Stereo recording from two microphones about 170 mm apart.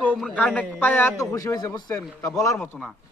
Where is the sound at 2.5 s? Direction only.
5° left (ahead or behind).